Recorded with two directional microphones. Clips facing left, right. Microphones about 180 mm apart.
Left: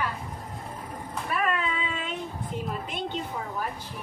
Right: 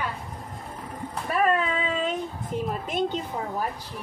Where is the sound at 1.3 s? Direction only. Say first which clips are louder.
Right 5 dB; 40° right (ahead or behind).